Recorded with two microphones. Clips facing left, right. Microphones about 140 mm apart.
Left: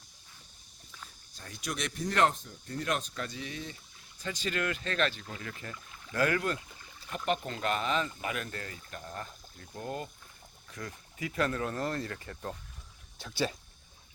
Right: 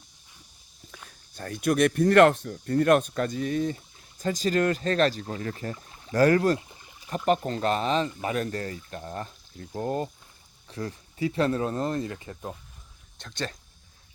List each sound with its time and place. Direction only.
1.4 s speech: 55° right (ahead or behind); by 6.6 s 35° right (ahead or behind)
6.6 s a sound: 20° right (ahead or behind)
7.3 s speech: 35° right (ahead or behind); by 12.5 s 15° right (ahead or behind)
13.1 s speech: 5° left (ahead or behind)